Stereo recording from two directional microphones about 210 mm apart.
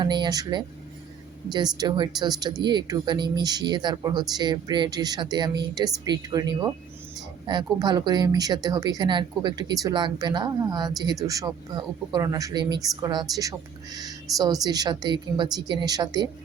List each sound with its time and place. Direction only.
0.0 s speech: 20° right (ahead or behind)